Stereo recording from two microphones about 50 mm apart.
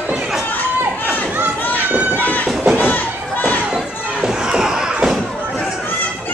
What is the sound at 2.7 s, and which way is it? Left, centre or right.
Crowd, left.